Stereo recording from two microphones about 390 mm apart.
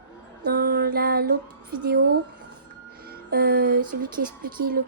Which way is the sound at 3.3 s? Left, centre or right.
Right.